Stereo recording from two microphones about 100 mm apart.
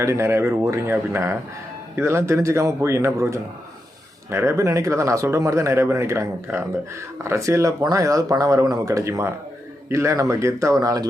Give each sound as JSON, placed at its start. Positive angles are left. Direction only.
{"t": 0.0, "sound": "speech", "side_deg": -30}